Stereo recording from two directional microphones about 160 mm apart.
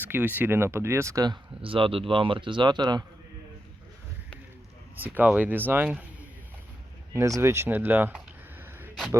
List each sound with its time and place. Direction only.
0.0 s speech: 10° right (ahead or behind); by 3.0 s 25° right (ahead or behind)
4.9 s speech: 10° right (ahead or behind)
7.1 s a sound: 20° right (ahead or behind)